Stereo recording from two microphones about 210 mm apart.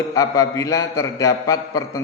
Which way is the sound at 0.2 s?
15° left (ahead or behind).